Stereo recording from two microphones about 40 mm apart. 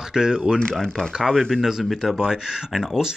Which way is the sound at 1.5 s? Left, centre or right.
Centre.